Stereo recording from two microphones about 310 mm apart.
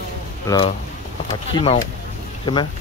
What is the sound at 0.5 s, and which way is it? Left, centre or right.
Speech, centre.